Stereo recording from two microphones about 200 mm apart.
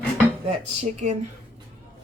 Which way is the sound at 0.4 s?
30° right (ahead or behind).